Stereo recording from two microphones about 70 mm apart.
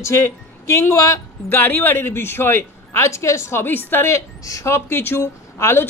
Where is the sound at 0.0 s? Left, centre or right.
Left.